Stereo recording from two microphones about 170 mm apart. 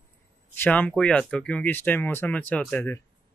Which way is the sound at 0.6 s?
10° left (ahead or behind).